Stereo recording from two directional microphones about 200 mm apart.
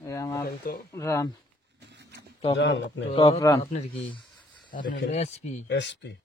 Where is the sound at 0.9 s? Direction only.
15° left (ahead or behind).